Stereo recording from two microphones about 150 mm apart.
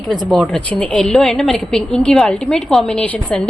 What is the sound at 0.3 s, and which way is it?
A woman's voice, 5° left (ahead or behind).